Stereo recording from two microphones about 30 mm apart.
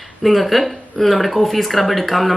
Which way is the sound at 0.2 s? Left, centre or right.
Centre.